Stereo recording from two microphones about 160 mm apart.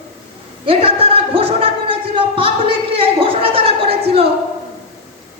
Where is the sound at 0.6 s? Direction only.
35° right (ahead or behind).